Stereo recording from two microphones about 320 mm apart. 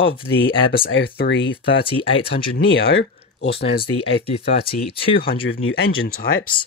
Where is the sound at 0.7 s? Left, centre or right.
Left.